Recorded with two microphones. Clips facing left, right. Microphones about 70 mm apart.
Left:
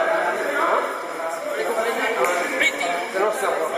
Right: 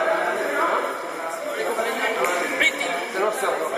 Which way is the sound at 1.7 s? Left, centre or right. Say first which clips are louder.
Left 2 dB; centre.